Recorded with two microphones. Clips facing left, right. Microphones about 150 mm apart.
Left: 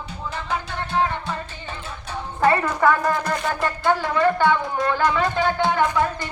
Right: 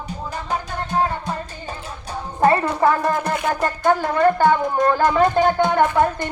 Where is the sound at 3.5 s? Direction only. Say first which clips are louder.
Right 3 dB; 45° right (ahead or behind).